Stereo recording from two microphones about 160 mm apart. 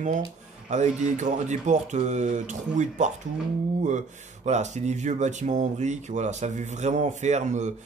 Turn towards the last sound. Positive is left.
turn(degrees=-45)  # may be behind; listen again after turning